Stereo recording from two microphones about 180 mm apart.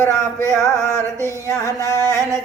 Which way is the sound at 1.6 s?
15° left (ahead or behind).